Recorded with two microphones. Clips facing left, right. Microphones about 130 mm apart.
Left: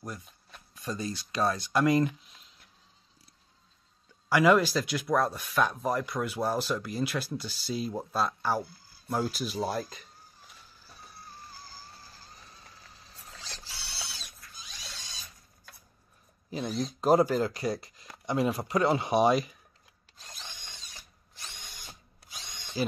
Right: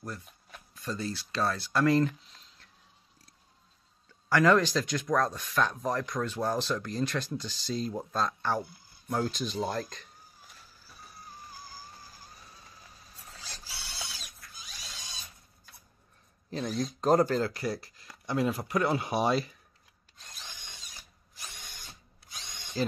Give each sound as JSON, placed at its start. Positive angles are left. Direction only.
{"t": 0.7, "sound": "speech", "side_deg": 15}
{"t": 4.3, "sound": "speech", "side_deg": 10}
{"t": 11.4, "sound": "vehicle", "side_deg": -15}
{"t": 13.4, "sound": "a sound", "side_deg": -10}
{"t": 16.4, "sound": "speech", "side_deg": 5}
{"t": 17.5, "sound": "speech", "side_deg": 20}
{"t": 20.2, "sound": "drill", "side_deg": 0}